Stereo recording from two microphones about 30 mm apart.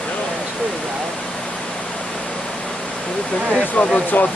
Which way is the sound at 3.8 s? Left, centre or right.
Left.